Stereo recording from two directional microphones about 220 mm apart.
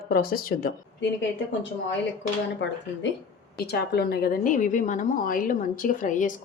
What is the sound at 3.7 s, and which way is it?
A woman's voice, 45° left (ahead or behind).